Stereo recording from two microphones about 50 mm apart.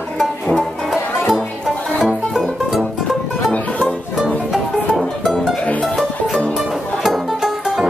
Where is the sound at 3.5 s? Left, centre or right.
Left.